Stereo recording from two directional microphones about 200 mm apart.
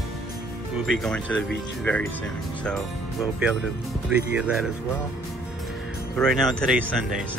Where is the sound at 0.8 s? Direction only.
5° left (ahead or behind).